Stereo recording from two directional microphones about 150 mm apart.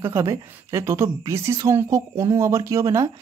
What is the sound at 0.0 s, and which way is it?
A woman's voice, 20° right (ahead or behind).